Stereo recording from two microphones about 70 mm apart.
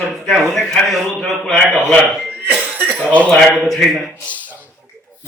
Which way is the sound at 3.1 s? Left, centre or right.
Centre.